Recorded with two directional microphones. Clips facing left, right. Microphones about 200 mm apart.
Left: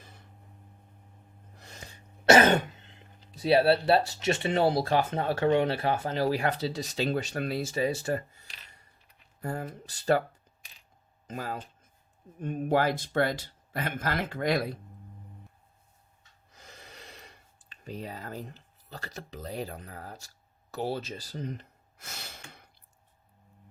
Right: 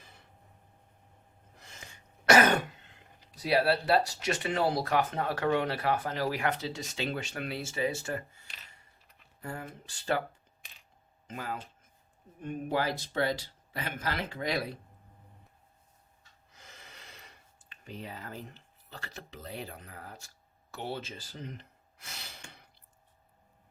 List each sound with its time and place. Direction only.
1.6 s throat clearing: 35° left (ahead or behind)
3.3 s speech: 25° left (ahead or behind)
9.4 s speech: 40° left (ahead or behind)
11.3 s speech: 40° left (ahead or behind)
16.6 s speech: 35° left (ahead or behind)